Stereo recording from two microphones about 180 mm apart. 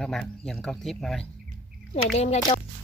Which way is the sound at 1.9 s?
35° left (ahead or behind).